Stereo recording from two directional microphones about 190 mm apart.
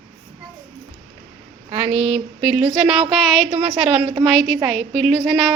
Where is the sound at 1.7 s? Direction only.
10° right (ahead or behind).